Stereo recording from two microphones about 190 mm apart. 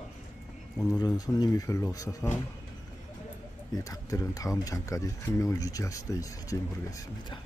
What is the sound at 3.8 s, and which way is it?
Speech, 15° left (ahead or behind).